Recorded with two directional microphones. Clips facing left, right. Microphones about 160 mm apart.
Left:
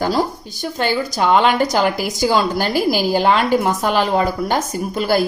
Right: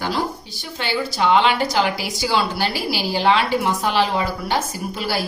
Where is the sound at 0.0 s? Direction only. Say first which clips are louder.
Left 5 dB; 40° left (ahead or behind).